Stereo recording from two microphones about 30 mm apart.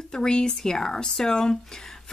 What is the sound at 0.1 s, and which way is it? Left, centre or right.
Speech, left.